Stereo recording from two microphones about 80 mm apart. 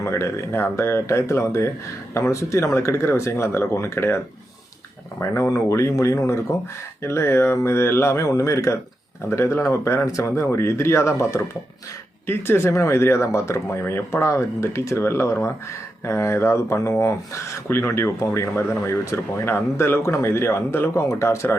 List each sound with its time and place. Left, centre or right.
0.0 s speech: left
5.2 s speech: left